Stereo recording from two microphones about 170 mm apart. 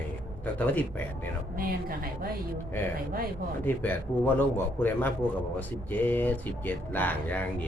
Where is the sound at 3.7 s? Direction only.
10° left (ahead or behind).